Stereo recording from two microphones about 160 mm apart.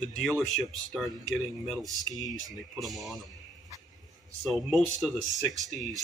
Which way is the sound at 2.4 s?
25° right (ahead or behind).